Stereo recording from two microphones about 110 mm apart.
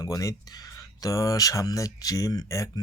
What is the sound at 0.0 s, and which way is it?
Speech, 30° left (ahead or behind).